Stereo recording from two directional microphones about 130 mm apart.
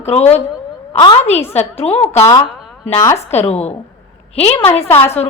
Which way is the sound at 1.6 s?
50° left (ahead or behind).